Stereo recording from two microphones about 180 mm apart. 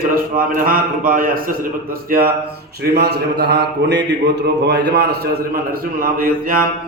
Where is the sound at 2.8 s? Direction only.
65° right (ahead or behind).